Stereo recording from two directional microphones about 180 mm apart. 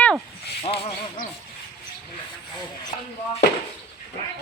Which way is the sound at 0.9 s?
50° left (ahead or behind).